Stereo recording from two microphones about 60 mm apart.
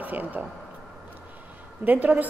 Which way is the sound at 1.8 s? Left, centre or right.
Right.